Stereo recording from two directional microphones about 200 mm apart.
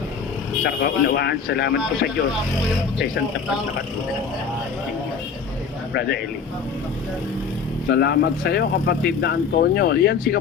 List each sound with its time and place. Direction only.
0.6 s speech: 55° left (ahead or behind)
5.9 s speech: 55° left (ahead or behind)
7.9 s speech: 55° left (ahead or behind)